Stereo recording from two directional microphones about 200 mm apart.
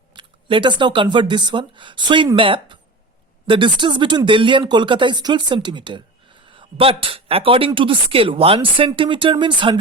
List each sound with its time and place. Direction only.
0.1 s speech: 25° right (ahead or behind)